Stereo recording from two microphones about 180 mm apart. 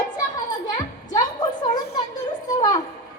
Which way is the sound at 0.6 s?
45° left (ahead or behind).